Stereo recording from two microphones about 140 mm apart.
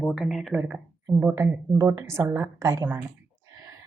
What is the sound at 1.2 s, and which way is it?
A woman's voice, 20° right (ahead or behind).